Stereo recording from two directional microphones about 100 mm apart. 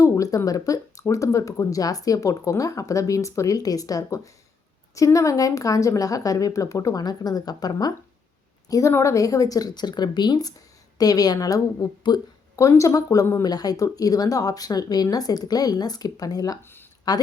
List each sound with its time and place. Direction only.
0.0 s speech: 35° left (ahead or behind)
8.9 s speech: 30° left (ahead or behind)
16.6 s a sound: 20° left (ahead or behind)